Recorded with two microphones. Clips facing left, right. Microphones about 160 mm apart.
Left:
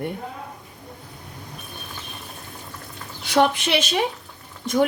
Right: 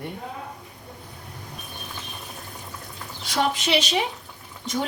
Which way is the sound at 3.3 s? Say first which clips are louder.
Left 4 dB; 60° left (ahead or behind).